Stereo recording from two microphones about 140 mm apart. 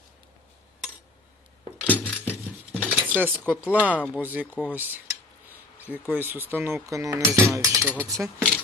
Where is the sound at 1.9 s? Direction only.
10° left (ahead or behind).